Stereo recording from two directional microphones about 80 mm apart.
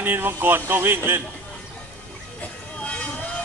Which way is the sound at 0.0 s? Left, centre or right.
Right.